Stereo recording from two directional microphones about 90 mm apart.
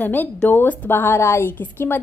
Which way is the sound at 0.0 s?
20° left (ahead or behind).